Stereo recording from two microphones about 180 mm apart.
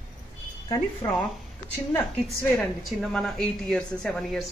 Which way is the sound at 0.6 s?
20° left (ahead or behind).